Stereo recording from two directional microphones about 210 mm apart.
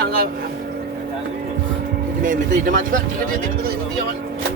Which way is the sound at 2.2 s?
40° right (ahead or behind).